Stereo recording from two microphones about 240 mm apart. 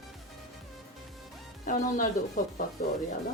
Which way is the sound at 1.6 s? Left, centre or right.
Left.